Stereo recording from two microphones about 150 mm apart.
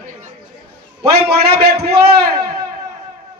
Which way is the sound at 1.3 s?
90° right.